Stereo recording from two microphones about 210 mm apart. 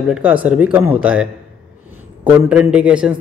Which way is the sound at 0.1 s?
5° right (ahead or behind).